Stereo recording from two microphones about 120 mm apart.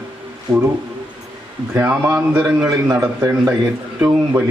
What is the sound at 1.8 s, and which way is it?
A man's voice, 10° right (ahead or behind).